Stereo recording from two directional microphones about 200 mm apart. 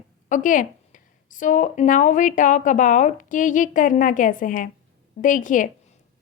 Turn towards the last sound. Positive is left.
turn(degrees=40)  # may be behind; listen again after turning